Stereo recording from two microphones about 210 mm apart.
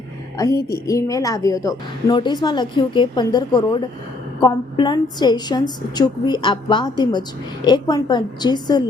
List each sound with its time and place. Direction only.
0.3 s a woman's voice: 15° left (ahead or behind)